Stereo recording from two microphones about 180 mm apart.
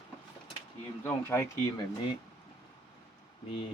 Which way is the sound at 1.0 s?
10° left (ahead or behind).